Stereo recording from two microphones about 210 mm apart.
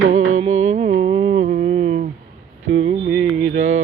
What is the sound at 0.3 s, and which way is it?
Music, 35° right (ahead or behind).